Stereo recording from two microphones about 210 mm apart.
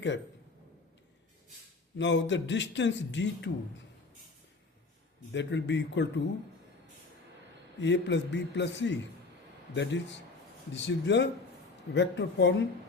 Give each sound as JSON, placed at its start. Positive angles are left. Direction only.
{"t": 2.0, "sound": "a man's voice", "side_deg": 60}
{"t": 5.3, "sound": "a man's voice", "side_deg": 60}
{"t": 7.8, "sound": "a man's voice", "side_deg": 55}